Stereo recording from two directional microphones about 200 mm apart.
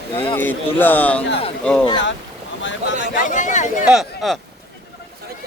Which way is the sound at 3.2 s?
40° left (ahead or behind).